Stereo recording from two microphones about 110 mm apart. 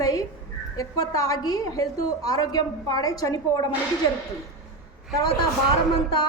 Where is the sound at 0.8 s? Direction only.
35° left (ahead or behind).